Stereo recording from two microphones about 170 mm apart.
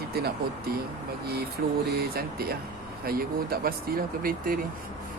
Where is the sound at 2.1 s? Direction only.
65° right (ahead or behind).